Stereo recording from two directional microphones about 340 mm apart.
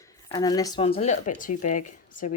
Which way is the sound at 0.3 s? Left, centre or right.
Centre.